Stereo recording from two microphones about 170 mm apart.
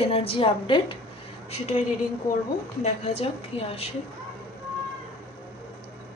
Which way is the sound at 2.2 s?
15° left (ahead or behind).